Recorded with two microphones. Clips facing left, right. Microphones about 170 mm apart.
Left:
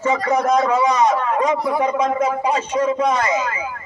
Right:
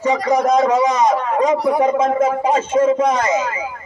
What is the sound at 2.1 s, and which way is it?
Speech, 45° right (ahead or behind).